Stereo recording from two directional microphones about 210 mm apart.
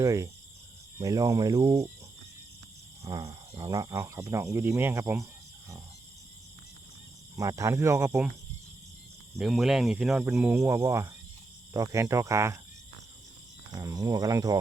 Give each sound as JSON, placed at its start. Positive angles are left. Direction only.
{"t": 0.0, "sound": "speech", "side_deg": -15}
{"t": 3.0, "sound": "speech", "side_deg": -15}
{"t": 7.3, "sound": "speech", "side_deg": -15}
{"t": 9.4, "sound": "speech", "side_deg": 0}
{"t": 13.7, "sound": "speech", "side_deg": -15}